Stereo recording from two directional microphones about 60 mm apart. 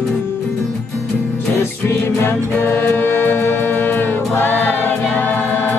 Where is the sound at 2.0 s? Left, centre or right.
Left.